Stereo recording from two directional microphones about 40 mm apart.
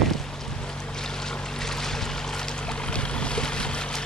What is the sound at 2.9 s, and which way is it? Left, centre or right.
Vehicle, left.